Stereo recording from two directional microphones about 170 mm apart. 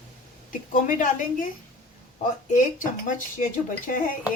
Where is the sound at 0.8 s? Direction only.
50° left (ahead or behind).